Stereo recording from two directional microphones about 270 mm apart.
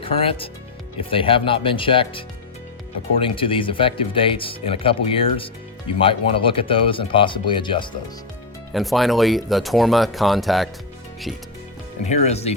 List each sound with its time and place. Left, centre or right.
0.0 s speech: centre
8.7 s speech: centre
12.0 s speech: left